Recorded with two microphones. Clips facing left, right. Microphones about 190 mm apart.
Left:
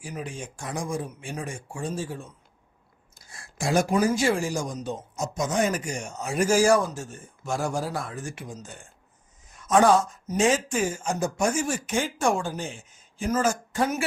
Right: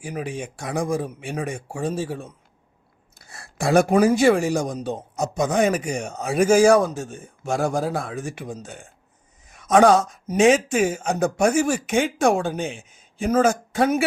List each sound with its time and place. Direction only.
0.0 s speech: 60° right (ahead or behind)
9.5 s speech: 75° right (ahead or behind)